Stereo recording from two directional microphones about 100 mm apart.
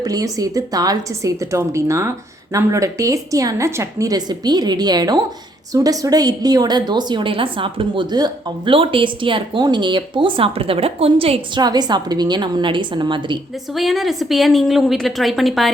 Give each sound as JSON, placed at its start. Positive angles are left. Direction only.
{"t": 0.0, "sound": "a woman's voice", "side_deg": -40}
{"t": 8.1, "sound": "a woman's voice", "side_deg": -45}
{"t": 8.7, "sound": "a woman's voice", "side_deg": -60}
{"t": 11.5, "sound": "a woman's voice", "side_deg": -45}
{"t": 13.7, "sound": "a woman's voice", "side_deg": 0}